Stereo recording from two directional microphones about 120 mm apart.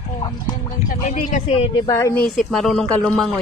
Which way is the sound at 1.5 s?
55° left (ahead or behind).